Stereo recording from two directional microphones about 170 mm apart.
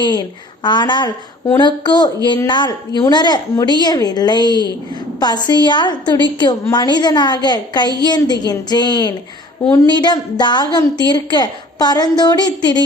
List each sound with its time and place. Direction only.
0.0 s a woman's voice: 25° left (ahead or behind)